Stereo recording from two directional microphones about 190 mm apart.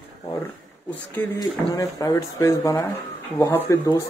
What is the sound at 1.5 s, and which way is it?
Speech, 20° left (ahead or behind).